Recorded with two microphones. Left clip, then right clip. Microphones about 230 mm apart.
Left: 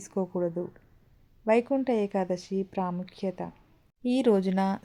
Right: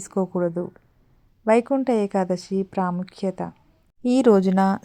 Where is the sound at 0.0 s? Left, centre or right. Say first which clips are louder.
Right 6 dB; right.